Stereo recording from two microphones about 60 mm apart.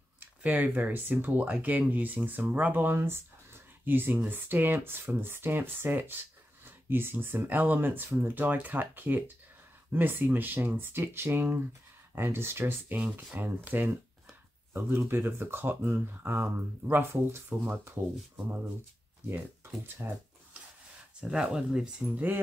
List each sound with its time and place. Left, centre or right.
0.4 s speech: right
19.6 s speech: right
21.2 s speech: centre
22.1 s speech: right